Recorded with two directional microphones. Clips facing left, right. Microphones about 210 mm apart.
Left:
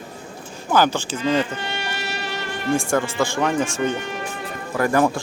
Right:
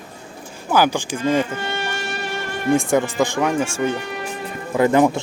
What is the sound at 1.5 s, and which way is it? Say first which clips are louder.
Music: right 3 dB; 50° right (ahead or behind).